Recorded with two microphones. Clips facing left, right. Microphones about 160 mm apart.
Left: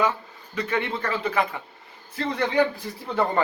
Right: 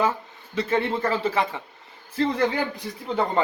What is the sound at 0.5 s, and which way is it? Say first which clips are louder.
Speech: right 3 dB; 30° right (ahead or behind).